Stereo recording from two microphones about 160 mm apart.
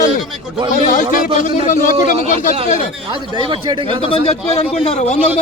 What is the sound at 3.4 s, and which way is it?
Speech, 30° right (ahead or behind).